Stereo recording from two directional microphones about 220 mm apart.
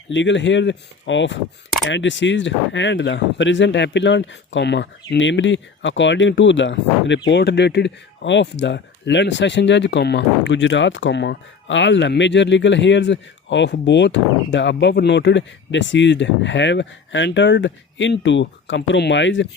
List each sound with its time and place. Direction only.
0.1 s speech: 55° left (ahead or behind)